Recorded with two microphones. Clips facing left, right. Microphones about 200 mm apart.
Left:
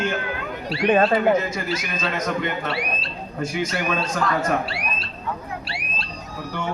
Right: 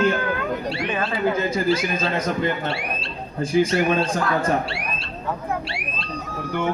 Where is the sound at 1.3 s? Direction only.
30° right (ahead or behind).